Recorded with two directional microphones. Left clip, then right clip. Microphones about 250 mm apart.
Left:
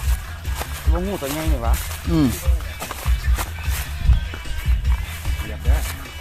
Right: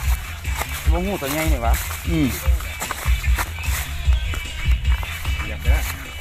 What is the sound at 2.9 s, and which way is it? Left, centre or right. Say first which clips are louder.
Music: right 3 dB; centre.